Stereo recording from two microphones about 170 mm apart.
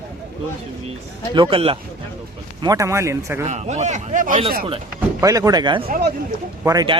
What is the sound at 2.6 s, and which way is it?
Speech, 20° right (ahead or behind).